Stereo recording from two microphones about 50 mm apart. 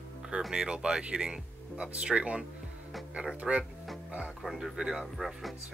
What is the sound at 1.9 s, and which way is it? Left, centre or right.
Speech, right.